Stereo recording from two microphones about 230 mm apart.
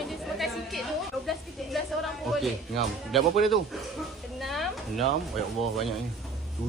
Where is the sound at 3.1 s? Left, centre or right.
Centre.